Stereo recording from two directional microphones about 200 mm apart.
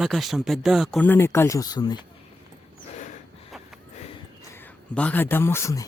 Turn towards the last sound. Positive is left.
turn(degrees=15)  # may be behind; listen again after turning